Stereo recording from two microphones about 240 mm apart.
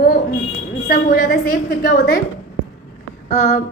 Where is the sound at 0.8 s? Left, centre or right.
Left.